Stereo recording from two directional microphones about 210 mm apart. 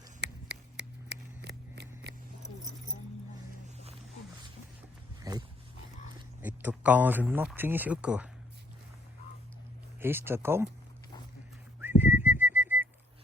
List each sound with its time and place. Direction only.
0.2 s a sound: 55° right (ahead or behind)
5.2 s dog: 15° right (ahead or behind)
6.4 s speech: 5° right (ahead or behind)
10.0 s speech: 10° right (ahead or behind)
11.8 s whistling: 10° right (ahead or behind)